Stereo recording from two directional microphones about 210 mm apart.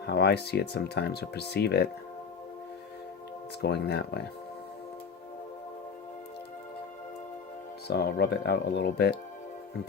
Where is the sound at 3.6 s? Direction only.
50° left (ahead or behind).